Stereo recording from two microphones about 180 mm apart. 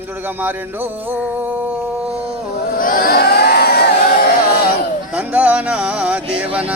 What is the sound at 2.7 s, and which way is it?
Crowd, 50° left (ahead or behind).